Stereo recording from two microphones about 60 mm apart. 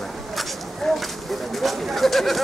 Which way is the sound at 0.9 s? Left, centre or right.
Centre.